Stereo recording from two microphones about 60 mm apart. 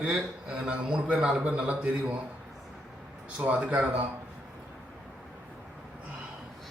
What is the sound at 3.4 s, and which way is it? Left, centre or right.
Speech, right.